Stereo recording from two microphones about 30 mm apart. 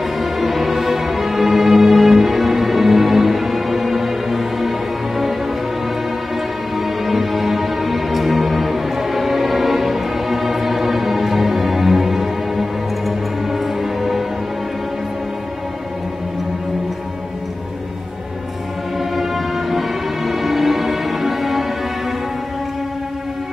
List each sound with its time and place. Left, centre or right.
0.0 s music: centre
6.8 s music: centre
18.9 s music: centre